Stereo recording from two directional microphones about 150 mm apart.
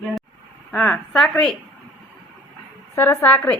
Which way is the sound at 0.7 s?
5° left (ahead or behind).